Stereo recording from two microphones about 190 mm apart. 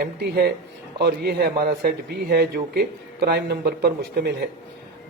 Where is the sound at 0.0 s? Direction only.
55° right (ahead or behind).